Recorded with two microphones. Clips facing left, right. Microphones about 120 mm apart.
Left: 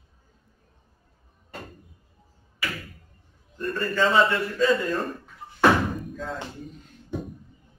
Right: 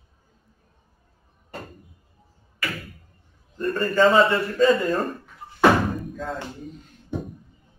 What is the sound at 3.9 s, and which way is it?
A man's voice, 45° right (ahead or behind).